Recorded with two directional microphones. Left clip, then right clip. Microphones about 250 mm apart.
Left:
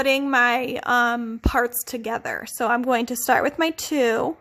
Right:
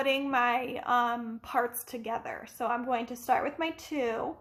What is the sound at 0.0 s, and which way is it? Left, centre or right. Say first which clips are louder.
A woman's voice: left 8 dB; left.